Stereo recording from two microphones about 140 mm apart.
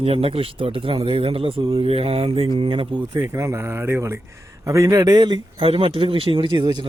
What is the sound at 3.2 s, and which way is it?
A man's voice, 20° right (ahead or behind).